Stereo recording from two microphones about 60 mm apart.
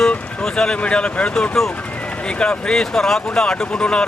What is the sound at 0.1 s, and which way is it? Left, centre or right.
Speech, centre.